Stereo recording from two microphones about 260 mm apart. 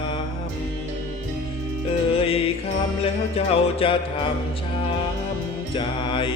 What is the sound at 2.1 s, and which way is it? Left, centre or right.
Music, left.